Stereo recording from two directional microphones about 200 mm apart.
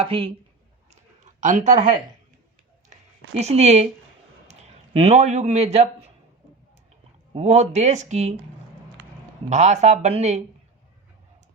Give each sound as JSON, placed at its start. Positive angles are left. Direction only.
{"t": 0.0, "sound": "speech", "side_deg": -30}
{"t": 4.9, "sound": "a man's voice", "side_deg": -30}
{"t": 7.3, "sound": "a man's voice", "side_deg": -35}
{"t": 9.5, "sound": "a man's voice", "side_deg": -35}